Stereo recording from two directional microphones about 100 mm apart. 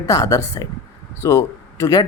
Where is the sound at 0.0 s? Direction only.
35° left (ahead or behind).